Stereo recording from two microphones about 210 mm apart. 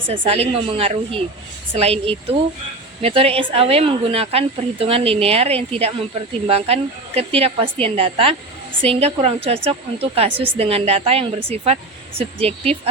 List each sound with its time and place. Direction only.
0.1 s a woman's voice: 30° right (ahead or behind)